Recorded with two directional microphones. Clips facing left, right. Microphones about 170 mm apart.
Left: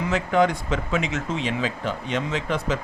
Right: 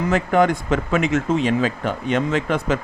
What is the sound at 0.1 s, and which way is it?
Speech, 50° right (ahead or behind).